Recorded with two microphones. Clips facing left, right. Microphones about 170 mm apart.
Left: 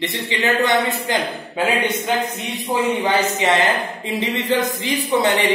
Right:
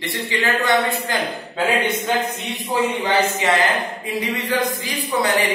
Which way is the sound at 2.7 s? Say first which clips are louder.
Left 1 dB; 20° left (ahead or behind).